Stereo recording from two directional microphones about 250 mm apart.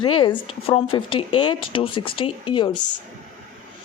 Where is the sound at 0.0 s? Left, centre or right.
Left.